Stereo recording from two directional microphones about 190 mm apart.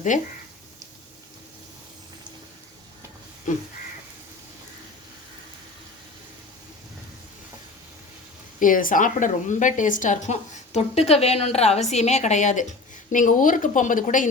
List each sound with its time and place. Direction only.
0.1 s a woman's voice: 40° left (ahead or behind)
3.5 s a woman's voice: 45° left (ahead or behind)
8.5 s a woman's voice: 45° left (ahead or behind)